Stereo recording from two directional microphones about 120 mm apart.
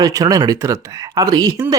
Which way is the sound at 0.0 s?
30° right (ahead or behind).